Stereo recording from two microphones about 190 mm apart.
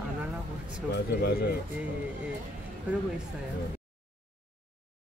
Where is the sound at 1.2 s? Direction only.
55° left (ahead or behind).